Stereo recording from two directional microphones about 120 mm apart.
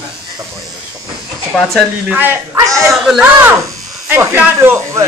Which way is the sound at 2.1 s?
15° right (ahead or behind).